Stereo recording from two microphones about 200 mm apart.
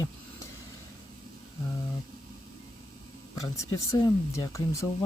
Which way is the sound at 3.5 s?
15° left (ahead or behind).